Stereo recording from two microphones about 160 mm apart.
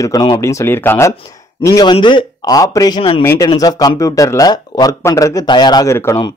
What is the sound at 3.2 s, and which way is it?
Speech, 20° left (ahead or behind).